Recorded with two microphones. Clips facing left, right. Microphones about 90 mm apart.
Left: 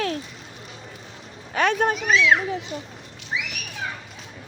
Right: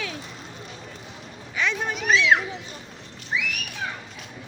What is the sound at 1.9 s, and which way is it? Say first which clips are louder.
Speech: left 1 dB; centre (ahead or behind).